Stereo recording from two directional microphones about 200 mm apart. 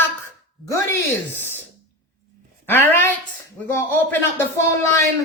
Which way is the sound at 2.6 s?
10° left (ahead or behind).